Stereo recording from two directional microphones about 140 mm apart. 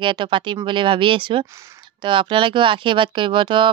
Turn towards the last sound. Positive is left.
turn(degrees=-35)  # may be behind; listen again after turning